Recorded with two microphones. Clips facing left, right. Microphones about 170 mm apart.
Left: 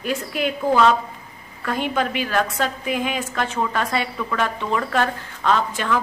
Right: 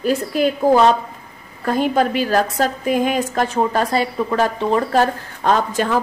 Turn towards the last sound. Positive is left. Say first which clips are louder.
# right 3 dB
turn(degrees=-40)  # may be behind; listen again after turning